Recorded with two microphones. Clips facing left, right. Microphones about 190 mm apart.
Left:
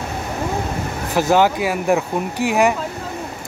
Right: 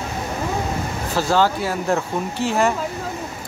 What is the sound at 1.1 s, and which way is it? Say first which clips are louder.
Speech: left 3 dB; 15° left (ahead or behind).